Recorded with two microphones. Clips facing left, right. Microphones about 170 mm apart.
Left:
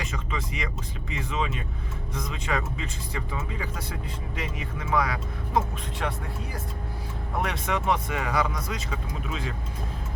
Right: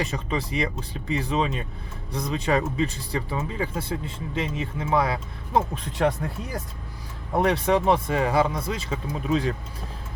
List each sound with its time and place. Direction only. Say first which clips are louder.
0.0 s speech: right 6 dB; 35° right (ahead or behind)